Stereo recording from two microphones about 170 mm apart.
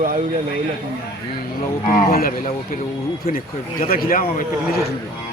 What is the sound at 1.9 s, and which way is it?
A man's voice, 60° left (ahead or behind).